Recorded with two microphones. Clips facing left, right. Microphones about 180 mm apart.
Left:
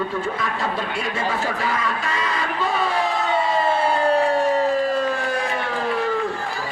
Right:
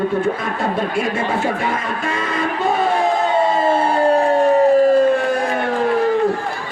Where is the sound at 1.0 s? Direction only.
50° right (ahead or behind).